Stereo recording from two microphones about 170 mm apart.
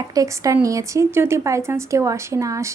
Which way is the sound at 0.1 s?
20° right (ahead or behind).